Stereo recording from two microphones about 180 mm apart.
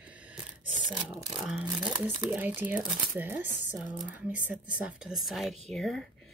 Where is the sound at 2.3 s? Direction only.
10° right (ahead or behind).